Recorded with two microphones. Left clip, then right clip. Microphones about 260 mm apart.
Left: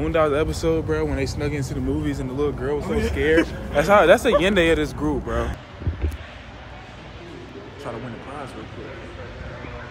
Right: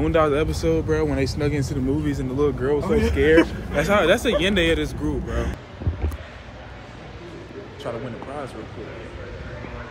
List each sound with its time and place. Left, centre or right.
0.0 s speech: centre
3.7 s speech: centre